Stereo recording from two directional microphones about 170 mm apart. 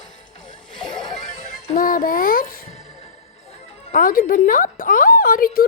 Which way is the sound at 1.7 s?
55° left (ahead or behind).